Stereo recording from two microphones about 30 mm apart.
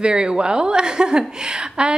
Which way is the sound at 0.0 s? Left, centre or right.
Right.